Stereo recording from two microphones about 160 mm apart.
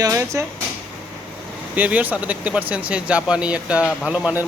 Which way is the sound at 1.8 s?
10° right (ahead or behind).